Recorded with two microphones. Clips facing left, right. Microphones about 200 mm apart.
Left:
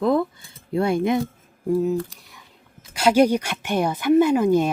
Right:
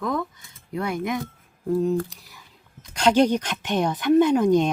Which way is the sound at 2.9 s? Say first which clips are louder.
Left 2 dB; 10° left (ahead or behind).